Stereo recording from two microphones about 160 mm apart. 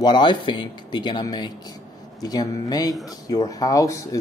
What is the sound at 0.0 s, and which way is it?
Speech, 30° left (ahead or behind).